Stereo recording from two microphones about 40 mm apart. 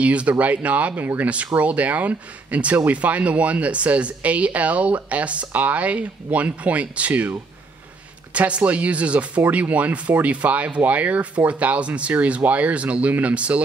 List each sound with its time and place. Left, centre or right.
0.0 s speech: right
8.3 s speech: right